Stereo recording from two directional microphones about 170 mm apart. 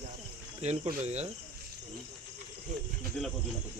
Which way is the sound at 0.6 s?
40° right (ahead or behind).